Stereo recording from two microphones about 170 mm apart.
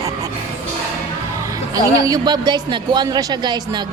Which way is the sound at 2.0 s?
25° right (ahead or behind).